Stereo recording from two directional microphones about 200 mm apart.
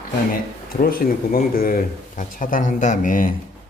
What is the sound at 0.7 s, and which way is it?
Speech, 45° left (ahead or behind).